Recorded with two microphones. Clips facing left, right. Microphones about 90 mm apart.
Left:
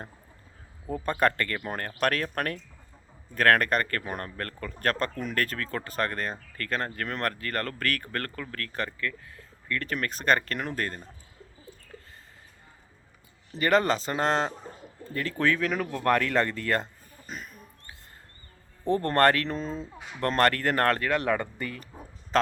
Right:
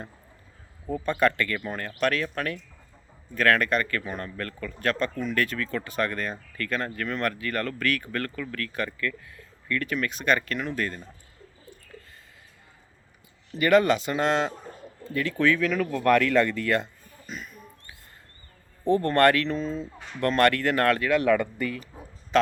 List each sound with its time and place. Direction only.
1.0 s a man's voice: 45° left (ahead or behind)
13.5 s speech: 35° left (ahead or behind)
15.8 s speech: 25° left (ahead or behind); by 17.6 s 40° left (ahead or behind)
18.9 s speech: 35° left (ahead or behind)
20.0 s speech: 10° left (ahead or behind)
20.2 s speech: 40° left (ahead or behind)